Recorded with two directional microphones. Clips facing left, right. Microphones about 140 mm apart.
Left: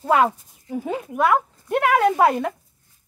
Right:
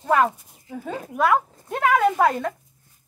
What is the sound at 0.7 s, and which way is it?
Speech, 20° left (ahead or behind).